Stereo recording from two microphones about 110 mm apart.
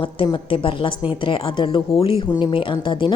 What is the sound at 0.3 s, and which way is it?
Speech, 50° left (ahead or behind).